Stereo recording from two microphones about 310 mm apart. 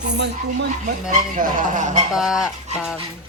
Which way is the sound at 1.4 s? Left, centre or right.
Right.